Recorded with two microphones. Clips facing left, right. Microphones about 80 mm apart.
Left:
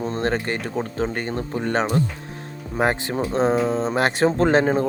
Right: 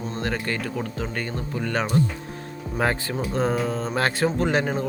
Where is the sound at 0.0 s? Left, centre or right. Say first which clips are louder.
Left 5 dB; left.